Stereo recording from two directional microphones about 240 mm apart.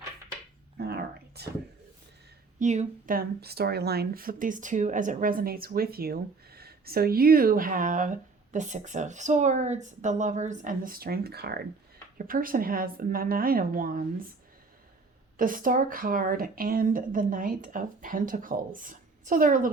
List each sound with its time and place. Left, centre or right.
0.8 s a sound: right
2.6 s speech: right
15.4 s speech: right